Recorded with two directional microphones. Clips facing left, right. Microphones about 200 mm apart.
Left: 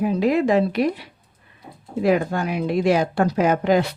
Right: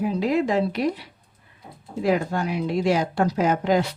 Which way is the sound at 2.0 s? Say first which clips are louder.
Left 3 dB; 60° left (ahead or behind).